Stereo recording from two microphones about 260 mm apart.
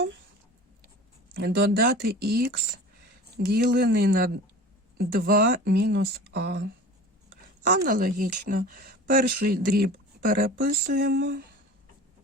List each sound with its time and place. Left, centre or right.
1.4 s speech: right
7.9 s speech: right